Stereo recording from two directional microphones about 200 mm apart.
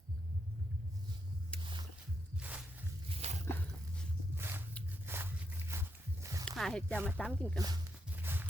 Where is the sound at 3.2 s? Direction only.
35° right (ahead or behind).